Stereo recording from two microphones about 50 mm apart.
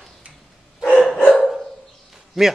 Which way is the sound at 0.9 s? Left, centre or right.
Centre.